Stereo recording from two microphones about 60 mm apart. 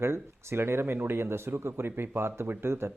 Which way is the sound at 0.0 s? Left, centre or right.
Right.